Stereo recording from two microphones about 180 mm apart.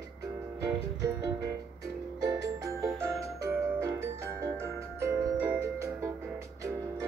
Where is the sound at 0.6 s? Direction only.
20° right (ahead or behind).